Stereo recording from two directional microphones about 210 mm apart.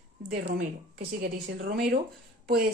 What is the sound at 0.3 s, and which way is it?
Speech, 50° right (ahead or behind).